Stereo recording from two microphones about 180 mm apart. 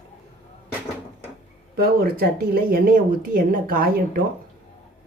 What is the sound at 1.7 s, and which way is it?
Speech, 55° right (ahead or behind).